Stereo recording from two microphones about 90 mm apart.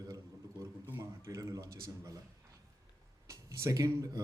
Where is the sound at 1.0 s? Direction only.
40° right (ahead or behind).